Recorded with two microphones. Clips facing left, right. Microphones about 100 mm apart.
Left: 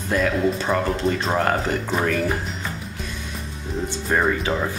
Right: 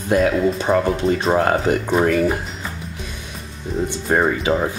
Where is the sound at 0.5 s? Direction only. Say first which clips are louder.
Right 4 dB; 20° right (ahead or behind).